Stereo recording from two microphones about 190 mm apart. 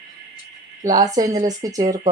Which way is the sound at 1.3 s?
40° right (ahead or behind).